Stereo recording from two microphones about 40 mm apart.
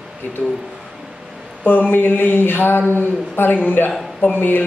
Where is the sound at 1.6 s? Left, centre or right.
Left.